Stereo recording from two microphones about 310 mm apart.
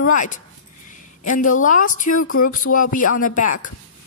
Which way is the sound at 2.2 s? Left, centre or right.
Left.